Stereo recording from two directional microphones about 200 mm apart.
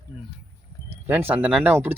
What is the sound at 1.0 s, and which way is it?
Speech, 10° right (ahead or behind).